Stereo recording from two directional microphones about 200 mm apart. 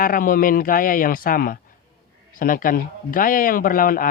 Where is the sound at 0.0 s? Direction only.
45° left (ahead or behind).